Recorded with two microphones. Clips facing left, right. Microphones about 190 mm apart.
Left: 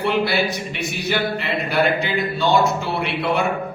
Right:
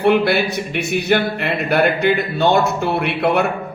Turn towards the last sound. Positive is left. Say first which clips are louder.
# right 4 dB
turn(degrees=-60)  # may be behind; listen again after turning